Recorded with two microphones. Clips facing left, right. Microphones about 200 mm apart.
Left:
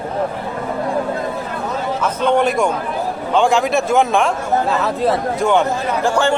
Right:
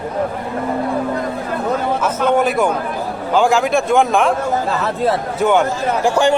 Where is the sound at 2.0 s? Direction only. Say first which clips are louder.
Left 2 dB; 5° right (ahead or behind).